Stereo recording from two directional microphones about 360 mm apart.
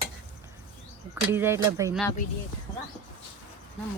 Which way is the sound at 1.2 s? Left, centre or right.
Centre.